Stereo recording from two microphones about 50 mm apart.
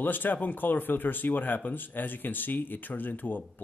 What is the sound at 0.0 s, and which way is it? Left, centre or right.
Speech, left.